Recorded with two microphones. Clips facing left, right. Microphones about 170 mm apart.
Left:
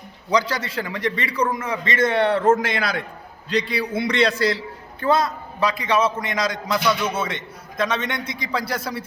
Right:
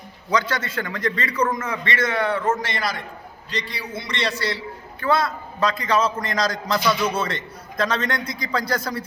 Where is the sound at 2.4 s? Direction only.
55° left (ahead or behind); by 4.7 s 75° left (ahead or behind).